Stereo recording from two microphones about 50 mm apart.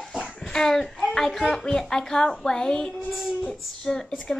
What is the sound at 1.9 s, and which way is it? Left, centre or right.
Female singing, centre.